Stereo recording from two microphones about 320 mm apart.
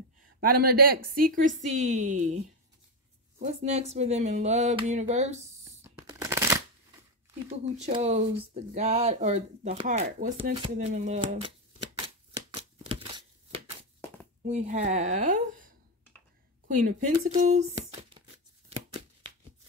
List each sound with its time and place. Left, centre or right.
0.4 s speech: right
5.8 s shuffling cards: centre
7.4 s speech: right
12.4 s a sound: centre
14.4 s speech: right
18.7 s a sound: centre